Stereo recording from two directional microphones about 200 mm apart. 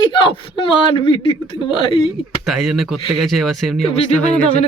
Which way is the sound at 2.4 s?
Centre (ahead or behind).